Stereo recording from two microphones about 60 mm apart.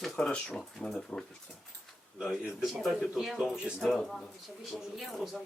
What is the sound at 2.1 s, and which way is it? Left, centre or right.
A man's voice, centre.